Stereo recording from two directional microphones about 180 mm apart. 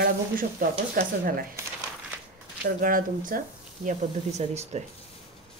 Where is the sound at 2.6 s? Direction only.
50° right (ahead or behind).